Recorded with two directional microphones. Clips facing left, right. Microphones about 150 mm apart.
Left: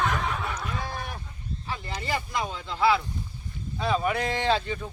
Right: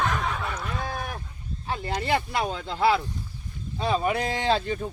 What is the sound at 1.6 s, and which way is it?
Speech, 60° right (ahead or behind).